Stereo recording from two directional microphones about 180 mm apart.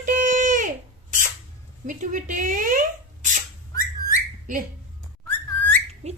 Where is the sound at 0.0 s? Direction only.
45° right (ahead or behind).